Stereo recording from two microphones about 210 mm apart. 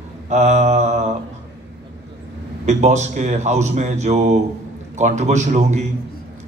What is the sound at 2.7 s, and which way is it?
A man's voice, 35° right (ahead or behind).